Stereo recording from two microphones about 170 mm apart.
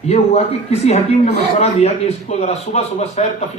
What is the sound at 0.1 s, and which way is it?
Speech, 40° left (ahead or behind).